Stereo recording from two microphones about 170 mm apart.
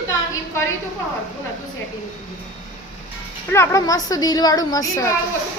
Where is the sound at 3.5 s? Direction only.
15° left (ahead or behind).